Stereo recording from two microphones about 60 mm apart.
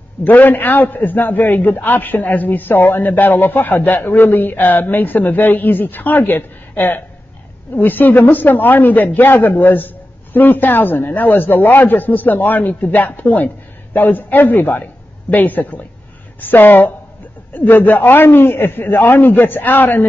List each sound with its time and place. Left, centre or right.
0.2 s a man's voice: left